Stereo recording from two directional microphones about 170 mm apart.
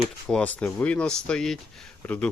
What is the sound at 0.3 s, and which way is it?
Speech, 5° left (ahead or behind).